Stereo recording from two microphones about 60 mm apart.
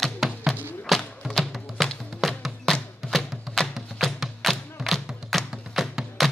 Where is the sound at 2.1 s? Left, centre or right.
Centre.